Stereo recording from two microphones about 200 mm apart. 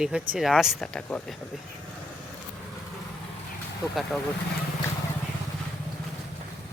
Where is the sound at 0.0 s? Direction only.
Centre (ahead or behind).